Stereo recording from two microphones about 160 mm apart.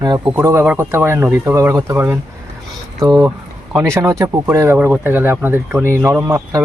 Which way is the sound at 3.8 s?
20° right (ahead or behind).